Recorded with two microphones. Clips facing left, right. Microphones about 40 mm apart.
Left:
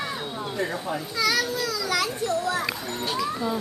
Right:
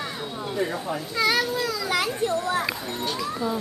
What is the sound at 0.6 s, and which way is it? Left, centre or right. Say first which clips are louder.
Speech: right 1 dB; centre.